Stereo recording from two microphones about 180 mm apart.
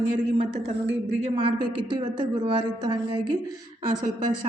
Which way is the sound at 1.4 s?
25° right (ahead or behind).